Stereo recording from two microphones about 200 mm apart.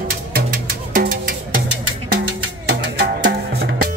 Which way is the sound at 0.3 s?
45° right (ahead or behind).